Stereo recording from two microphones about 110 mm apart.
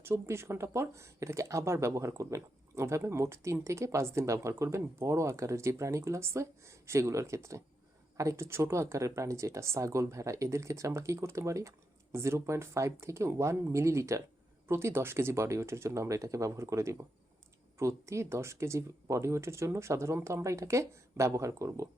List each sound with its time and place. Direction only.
0.0 s speech: 25° right (ahead or behind)